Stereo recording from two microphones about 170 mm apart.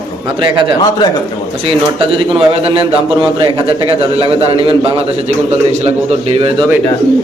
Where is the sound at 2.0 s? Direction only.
30° right (ahead or behind).